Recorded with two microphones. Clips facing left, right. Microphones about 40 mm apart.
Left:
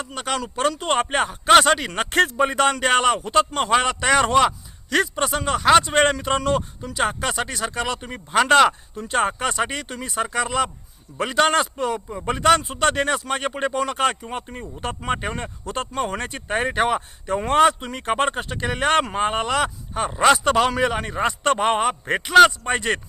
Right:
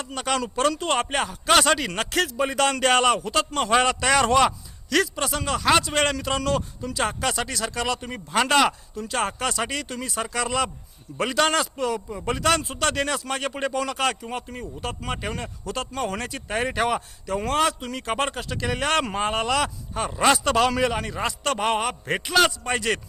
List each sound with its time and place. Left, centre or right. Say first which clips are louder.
0.0 s speech: even; centre
2.0 s speech: left 9 dB; left
2.4 s a man's voice: left 3 dB; centre
9.0 s a man's voice: left 4 dB; left
14.8 s a man's voice: left 6 dB; left